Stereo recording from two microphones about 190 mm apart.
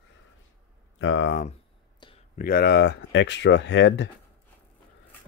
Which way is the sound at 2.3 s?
50° left (ahead or behind).